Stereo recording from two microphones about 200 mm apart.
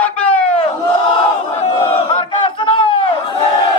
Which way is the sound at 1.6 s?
25° left (ahead or behind).